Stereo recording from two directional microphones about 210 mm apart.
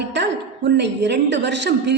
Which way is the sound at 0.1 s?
55° right (ahead or behind).